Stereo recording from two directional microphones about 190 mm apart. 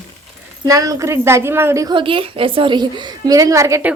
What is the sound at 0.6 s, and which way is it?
A woman's voice, 15° right (ahead or behind).